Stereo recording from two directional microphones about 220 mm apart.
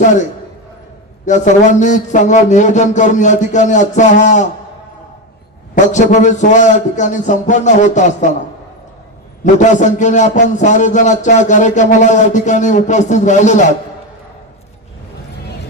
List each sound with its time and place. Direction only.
1.2 s a man's voice: 35° left (ahead or behind)
5.7 s a man's voice: 35° left (ahead or behind)
9.4 s a man's voice: 35° left (ahead or behind)